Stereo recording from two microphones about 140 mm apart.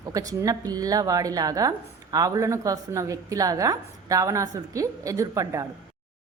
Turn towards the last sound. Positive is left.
turn(degrees=-25)  # may be behind; listen again after turning